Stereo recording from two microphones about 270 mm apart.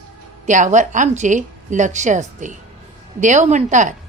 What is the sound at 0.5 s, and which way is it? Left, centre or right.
A woman's voice, right.